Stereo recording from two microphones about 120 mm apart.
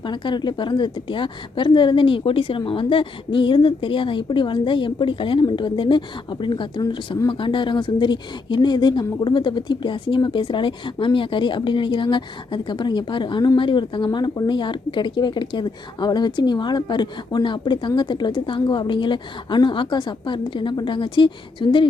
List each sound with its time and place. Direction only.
0.0 s a woman's voice: 40° left (ahead or behind)